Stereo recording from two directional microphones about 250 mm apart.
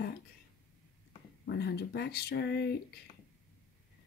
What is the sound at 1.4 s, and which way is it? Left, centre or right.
Speech, left.